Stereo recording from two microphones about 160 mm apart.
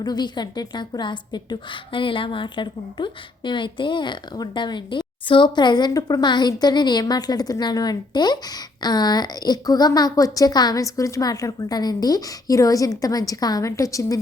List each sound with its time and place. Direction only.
0.0 s a woman's voice: 25° left (ahead or behind)